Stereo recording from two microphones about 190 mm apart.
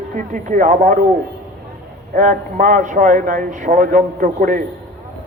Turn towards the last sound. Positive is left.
turn(degrees=-45)  # may be behind; listen again after turning